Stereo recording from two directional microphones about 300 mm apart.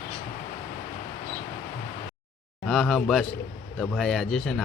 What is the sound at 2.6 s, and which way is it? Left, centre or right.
Speech, centre.